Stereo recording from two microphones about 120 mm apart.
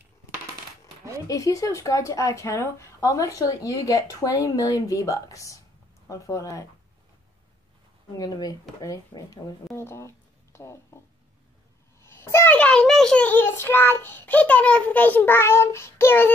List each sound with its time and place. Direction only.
1.2 s speech: 30° left (ahead or behind)
8.2 s speech: 35° left (ahead or behind)
12.0 s a sound: 20° left (ahead or behind)
12.5 s a child's voice: 10° left (ahead or behind)